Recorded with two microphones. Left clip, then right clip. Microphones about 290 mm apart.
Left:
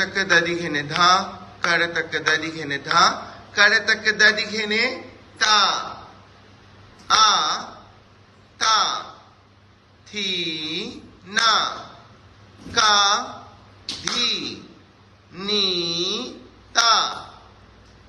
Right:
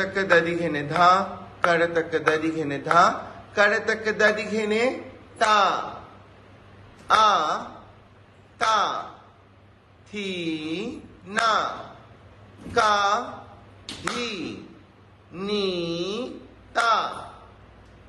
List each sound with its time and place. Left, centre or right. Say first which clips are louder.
0.0 s a man's voice: left 2 dB; centre
7.1 s a man's voice: left 2 dB; centre
10.1 s a man's voice: left 5 dB; centre
12.7 s a man's voice: left 3 dB; centre